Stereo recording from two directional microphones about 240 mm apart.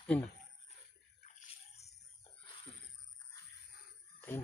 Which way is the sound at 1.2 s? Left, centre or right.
Left.